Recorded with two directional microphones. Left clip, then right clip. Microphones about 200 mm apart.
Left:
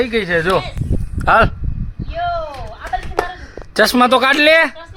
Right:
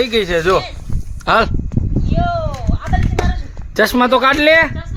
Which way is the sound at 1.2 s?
Centre (ahead or behind).